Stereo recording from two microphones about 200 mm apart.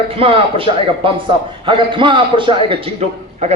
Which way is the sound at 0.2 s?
25° right (ahead or behind).